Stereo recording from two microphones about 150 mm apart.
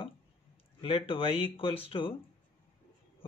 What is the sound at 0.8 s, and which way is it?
Speech, 40° left (ahead or behind).